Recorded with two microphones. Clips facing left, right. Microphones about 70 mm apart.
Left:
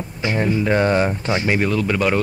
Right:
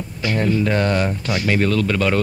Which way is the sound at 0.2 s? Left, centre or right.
Left.